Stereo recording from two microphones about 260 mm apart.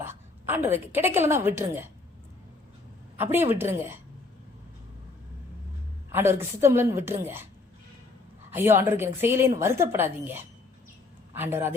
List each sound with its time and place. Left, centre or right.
0.0 s a woman's voice: centre
3.2 s a woman's voice: centre
6.1 s a woman's voice: centre
8.4 s a woman's voice: centre